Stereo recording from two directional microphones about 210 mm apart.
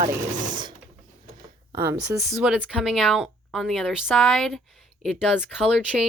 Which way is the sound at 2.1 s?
5° right (ahead or behind).